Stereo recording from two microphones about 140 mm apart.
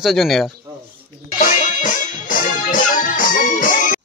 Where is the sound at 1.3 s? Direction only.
70° left (ahead or behind).